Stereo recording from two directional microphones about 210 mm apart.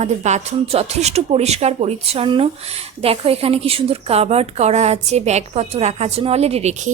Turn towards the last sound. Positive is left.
turn(degrees=-30)  # may be behind; listen again after turning